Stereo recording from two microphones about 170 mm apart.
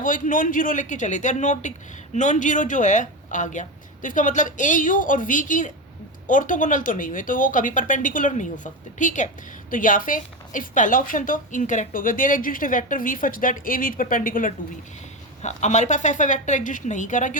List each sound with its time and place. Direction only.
0.0 s speech: 50° left (ahead or behind)